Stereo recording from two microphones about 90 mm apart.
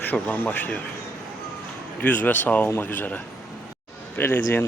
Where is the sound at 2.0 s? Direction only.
20° left (ahead or behind).